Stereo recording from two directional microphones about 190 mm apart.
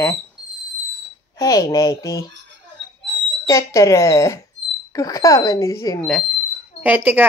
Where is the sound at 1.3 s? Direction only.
20° left (ahead or behind).